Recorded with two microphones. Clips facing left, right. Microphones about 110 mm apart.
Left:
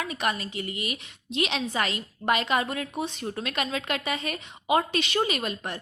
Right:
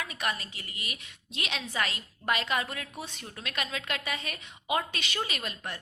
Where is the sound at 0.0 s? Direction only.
30° left (ahead or behind).